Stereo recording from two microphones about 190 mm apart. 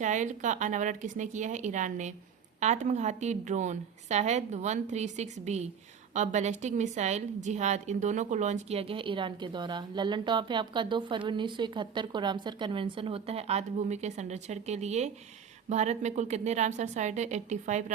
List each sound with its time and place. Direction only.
0.0 s a woman's voice: 40° right (ahead or behind)